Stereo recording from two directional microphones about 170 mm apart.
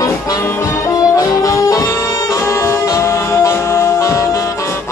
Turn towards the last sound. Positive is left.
turn(degrees=20)  # may be behind; listen again after turning